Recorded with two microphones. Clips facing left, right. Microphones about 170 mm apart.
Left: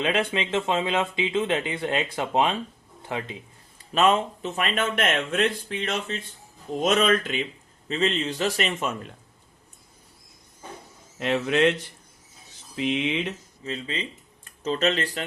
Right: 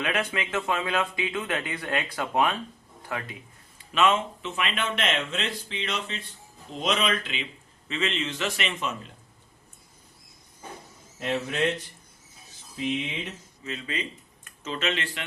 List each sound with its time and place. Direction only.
0.0 s speech: 25° left (ahead or behind)
3.8 s a man's voice: 40° left (ahead or behind)
11.2 s speech: 75° left (ahead or behind)
12.7 s speech: 80° left
13.7 s a man's voice: 30° left (ahead or behind)